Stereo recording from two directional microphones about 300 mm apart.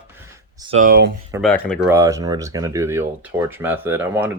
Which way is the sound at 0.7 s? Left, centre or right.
Right.